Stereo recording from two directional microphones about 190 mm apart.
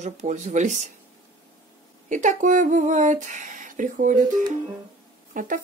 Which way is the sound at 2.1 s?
40° right (ahead or behind).